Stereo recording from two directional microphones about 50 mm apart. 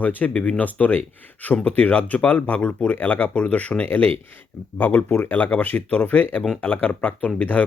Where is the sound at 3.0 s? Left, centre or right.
Left.